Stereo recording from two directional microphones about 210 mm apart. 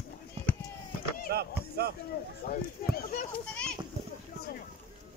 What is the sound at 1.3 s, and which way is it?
Speech, 50° right (ahead or behind).